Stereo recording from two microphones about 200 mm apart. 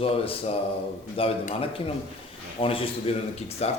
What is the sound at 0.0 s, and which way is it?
Mantra, 30° left (ahead or behind).